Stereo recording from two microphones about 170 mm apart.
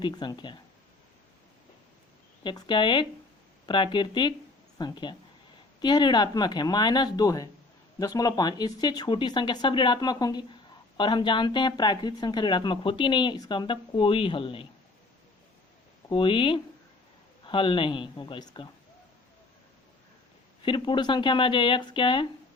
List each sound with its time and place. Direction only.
0.0 s speech: 25° left (ahead or behind)
2.4 s speech: 25° left (ahead or behind)
16.0 s speech: 30° left (ahead or behind)
20.7 s speech: 30° left (ahead or behind)